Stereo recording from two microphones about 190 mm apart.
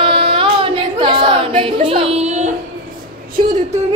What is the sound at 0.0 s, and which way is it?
Singing, 25° right (ahead or behind).